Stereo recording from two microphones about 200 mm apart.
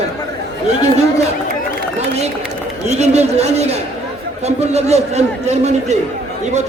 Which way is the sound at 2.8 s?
35° right (ahead or behind).